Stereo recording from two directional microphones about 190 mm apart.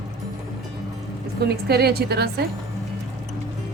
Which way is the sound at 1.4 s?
55° right (ahead or behind).